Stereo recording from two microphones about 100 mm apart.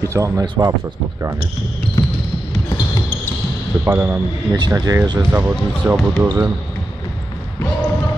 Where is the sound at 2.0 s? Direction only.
40° left (ahead or behind).